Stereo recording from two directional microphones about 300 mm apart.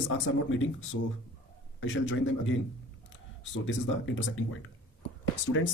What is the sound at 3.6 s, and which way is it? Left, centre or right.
Speech, left.